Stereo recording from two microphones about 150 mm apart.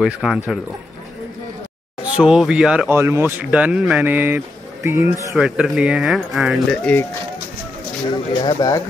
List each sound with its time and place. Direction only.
0.0 s speech: 5° right (ahead or behind)
2.1 s speech: 5° right (ahead or behind)
8.1 s speech: 30° left (ahead or behind)